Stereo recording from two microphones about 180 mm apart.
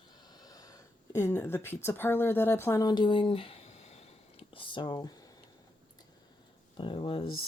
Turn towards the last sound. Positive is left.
turn(degrees=30)  # may be behind; listen again after turning